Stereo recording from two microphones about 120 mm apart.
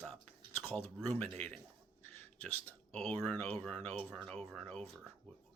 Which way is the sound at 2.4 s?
5° left (ahead or behind).